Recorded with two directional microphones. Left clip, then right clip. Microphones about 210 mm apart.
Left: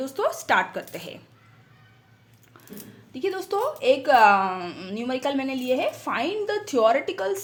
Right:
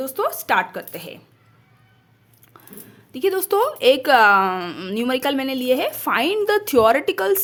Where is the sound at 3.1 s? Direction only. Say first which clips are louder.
Right 7 dB; 35° right (ahead or behind).